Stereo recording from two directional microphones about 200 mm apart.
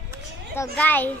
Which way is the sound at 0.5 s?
10° left (ahead or behind).